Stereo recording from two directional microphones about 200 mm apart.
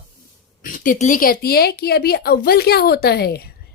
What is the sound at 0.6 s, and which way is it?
A woman's voice, 40° left (ahead or behind).